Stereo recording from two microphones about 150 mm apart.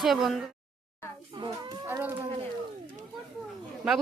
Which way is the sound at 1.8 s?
15° right (ahead or behind).